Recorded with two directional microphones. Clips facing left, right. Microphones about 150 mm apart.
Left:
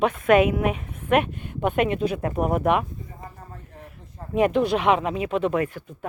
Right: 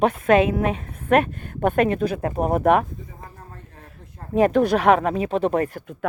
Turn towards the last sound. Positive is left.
turn(degrees=-40)  # may be behind; listen again after turning